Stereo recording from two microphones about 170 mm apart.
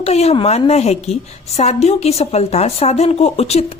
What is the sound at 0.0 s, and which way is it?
A woman's voice, 40° left (ahead or behind).